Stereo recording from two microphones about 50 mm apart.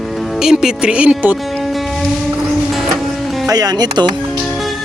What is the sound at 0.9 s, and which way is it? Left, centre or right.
Speech, right.